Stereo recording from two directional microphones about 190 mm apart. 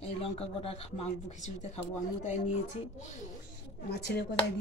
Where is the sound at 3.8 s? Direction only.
60° left (ahead or behind).